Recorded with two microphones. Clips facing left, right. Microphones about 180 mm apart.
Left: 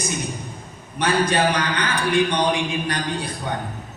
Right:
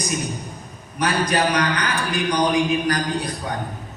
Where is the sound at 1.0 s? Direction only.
30° left (ahead or behind).